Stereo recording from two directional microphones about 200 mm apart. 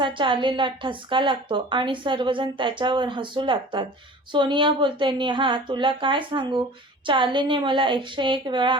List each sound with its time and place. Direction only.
0.0 s a woman's voice: 25° right (ahead or behind)